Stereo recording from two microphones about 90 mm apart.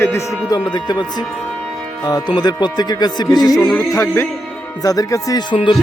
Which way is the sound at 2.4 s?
50° left (ahead or behind).